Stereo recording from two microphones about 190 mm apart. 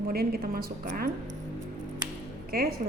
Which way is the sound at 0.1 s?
50° right (ahead or behind).